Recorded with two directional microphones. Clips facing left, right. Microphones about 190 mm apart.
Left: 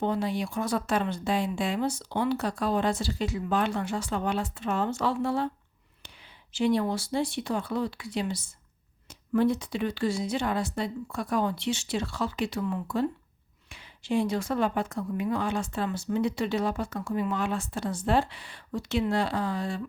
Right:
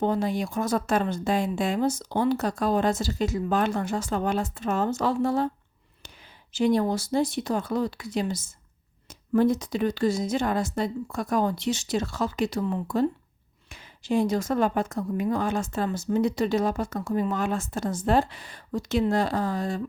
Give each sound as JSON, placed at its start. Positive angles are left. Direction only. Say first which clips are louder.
{"t": 0.0, "sound": "speech", "louder": "right 3 dB", "side_deg": -45}
{"t": 6.5, "sound": "speech", "louder": "right 3 dB", "side_deg": -40}